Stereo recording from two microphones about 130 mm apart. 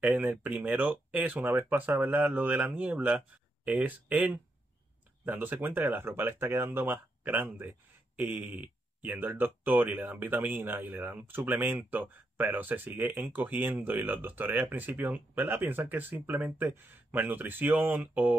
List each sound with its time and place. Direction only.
0.0 s speech: 15° right (ahead or behind)